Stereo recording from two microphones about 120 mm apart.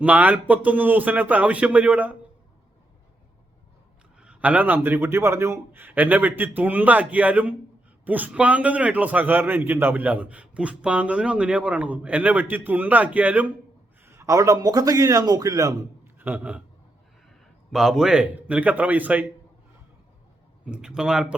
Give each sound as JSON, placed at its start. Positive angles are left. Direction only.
{"t": 0.0, "sound": "a man's voice", "side_deg": -10}
{"t": 4.2, "sound": "a man's voice", "side_deg": -10}
{"t": 16.1, "sound": "a man's voice", "side_deg": -15}
{"t": 17.7, "sound": "a man's voice", "side_deg": -5}
{"t": 20.7, "sound": "speech", "side_deg": -5}